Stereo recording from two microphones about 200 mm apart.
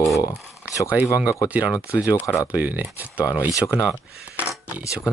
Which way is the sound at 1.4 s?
5° right (ahead or behind).